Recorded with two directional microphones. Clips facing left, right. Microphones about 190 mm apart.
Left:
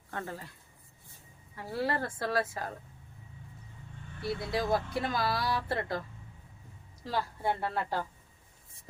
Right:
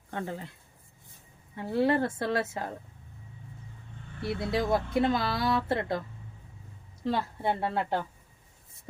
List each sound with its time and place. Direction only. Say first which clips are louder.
0.1 s speech: right 4 dB; 20° right (ahead or behind)
1.5 s speech: right 7 dB; 25° right (ahead or behind)
4.2 s speech: right 3 dB; 25° right (ahead or behind)
7.0 s speech: right 3 dB; 20° right (ahead or behind)